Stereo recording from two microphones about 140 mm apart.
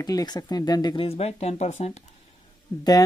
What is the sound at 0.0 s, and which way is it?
Speech, 25° left (ahead or behind).